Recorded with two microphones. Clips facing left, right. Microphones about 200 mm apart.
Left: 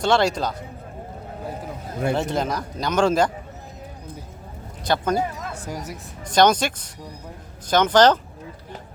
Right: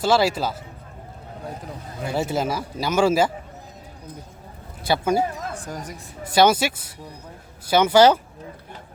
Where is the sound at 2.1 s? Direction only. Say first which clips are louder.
Even; 5° right (ahead or behind).